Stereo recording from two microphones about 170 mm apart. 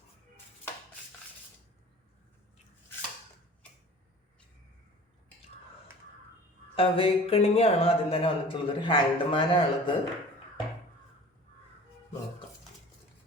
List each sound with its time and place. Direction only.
6.7 s speech: 35° left (ahead or behind)